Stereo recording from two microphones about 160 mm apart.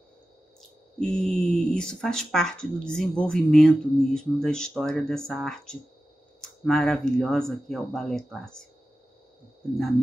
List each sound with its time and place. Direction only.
0.6 s speech: 5° left (ahead or behind)